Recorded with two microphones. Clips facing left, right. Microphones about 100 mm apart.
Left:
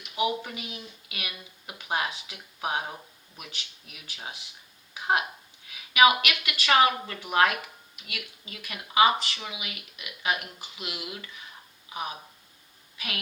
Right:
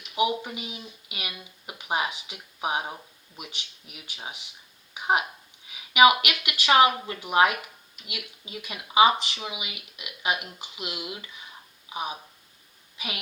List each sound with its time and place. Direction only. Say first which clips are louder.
0.2 s a woman's voice: right 2 dB; 20° right (ahead or behind)